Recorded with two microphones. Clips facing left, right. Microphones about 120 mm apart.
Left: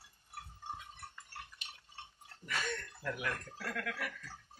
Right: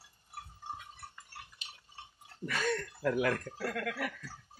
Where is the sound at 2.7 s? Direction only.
70° right (ahead or behind).